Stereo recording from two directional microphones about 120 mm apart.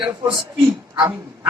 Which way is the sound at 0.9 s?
25° right (ahead or behind).